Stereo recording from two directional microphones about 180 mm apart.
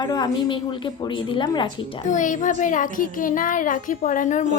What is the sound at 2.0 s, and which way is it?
A child's voice, 45° left (ahead or behind).